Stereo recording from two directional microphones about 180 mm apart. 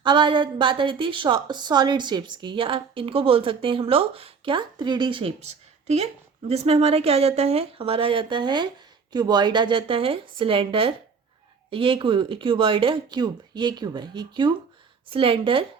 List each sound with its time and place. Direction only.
0.0 s a woman's voice: 25° right (ahead or behind)
6.5 s a woman's voice: 35° right (ahead or behind)